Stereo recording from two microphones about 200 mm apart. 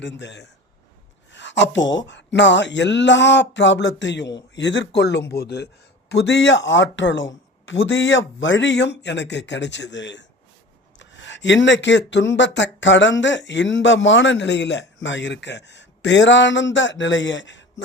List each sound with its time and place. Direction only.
0.0 s speech: 60° left (ahead or behind)
1.3 s a sound: 60° left (ahead or behind)
1.9 s speech: 65° left (ahead or behind)